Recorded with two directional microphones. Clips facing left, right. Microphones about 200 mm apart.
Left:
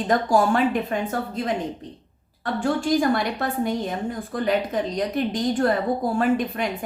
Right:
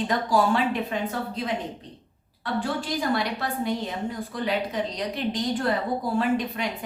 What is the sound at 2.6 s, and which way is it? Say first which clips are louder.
A woman's voice: left 10 dB; 50° left (ahead or behind).